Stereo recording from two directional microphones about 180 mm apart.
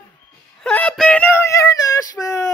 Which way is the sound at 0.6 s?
5° left (ahead or behind).